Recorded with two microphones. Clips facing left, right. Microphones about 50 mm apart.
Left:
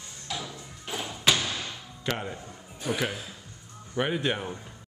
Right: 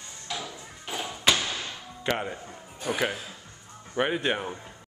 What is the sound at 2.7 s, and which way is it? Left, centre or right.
Speech, centre.